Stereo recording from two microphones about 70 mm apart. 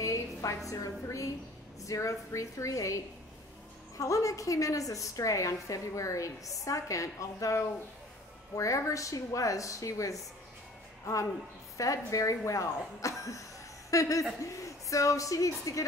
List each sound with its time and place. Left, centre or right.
0.0 s a sound: left
0.7 s a woman's voice: left
4.0 s a woman's voice: left
11.7 s a woman's voice: left